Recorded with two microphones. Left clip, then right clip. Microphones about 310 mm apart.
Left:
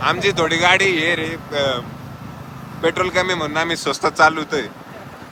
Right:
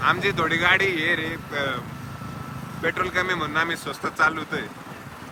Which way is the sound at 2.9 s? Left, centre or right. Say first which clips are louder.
Left 5 dB; centre.